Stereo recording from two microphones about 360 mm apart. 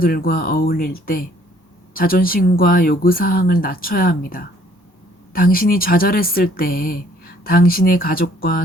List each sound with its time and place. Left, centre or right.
0.0 s speech: left